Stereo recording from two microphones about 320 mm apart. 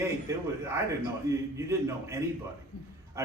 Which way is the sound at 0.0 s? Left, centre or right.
Centre.